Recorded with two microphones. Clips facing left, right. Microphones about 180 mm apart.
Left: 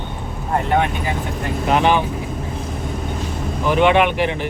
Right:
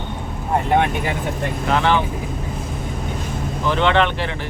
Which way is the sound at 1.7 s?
15° left (ahead or behind).